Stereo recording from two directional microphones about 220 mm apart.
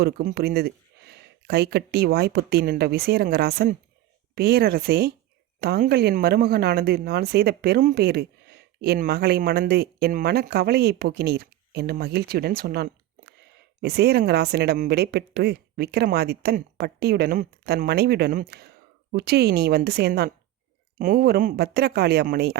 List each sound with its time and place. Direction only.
0.0 s speech: 45° right (ahead or behind)